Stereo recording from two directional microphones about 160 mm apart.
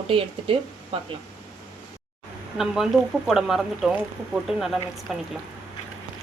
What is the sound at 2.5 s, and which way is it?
Speech, centre (ahead or behind).